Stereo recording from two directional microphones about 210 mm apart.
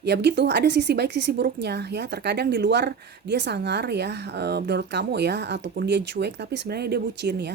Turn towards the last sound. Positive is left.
turn(degrees=-50)  # may be behind; listen again after turning